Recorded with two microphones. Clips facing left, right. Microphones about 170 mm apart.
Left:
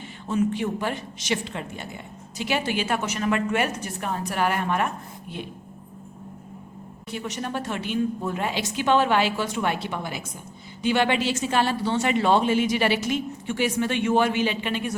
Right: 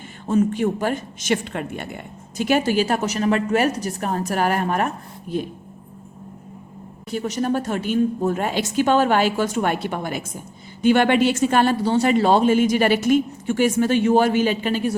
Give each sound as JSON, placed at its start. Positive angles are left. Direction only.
{"t": 0.3, "sound": "a woman's voice", "side_deg": -45}
{"t": 2.4, "sound": "a woman's voice", "side_deg": -45}
{"t": 7.1, "sound": "a woman's voice", "side_deg": -40}